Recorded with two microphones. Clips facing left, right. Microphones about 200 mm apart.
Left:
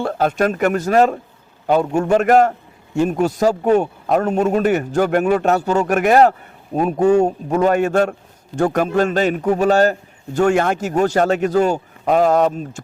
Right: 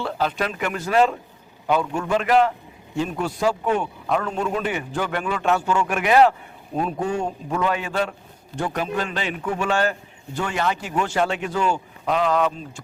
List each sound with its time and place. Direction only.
0.0 s a man's voice: 50° left (ahead or behind)